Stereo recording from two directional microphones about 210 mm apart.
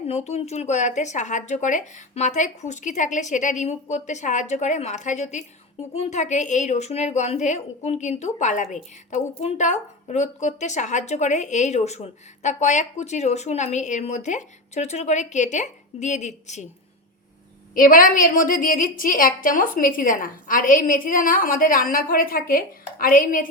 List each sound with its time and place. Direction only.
0.1 s a woman's voice: 30° left (ahead or behind)
17.7 s a woman's voice: 40° left (ahead or behind)